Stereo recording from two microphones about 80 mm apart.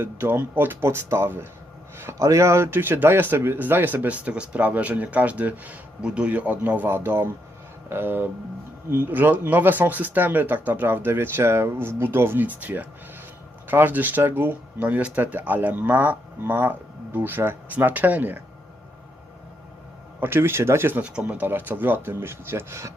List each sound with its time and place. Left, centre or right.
0.0 s speech: right
20.1 s speech: right
21.0 s speech: centre; by 22.9 s right